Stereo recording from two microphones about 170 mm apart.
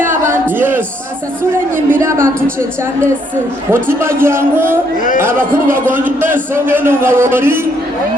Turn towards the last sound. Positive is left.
turn(degrees=-15)  # may be behind; listen again after turning